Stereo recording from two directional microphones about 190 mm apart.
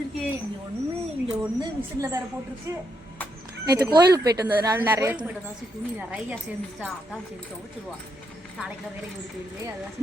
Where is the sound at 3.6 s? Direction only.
20° right (ahead or behind).